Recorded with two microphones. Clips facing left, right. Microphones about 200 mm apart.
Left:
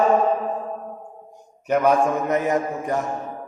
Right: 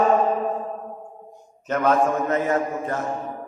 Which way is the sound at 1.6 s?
15° left (ahead or behind).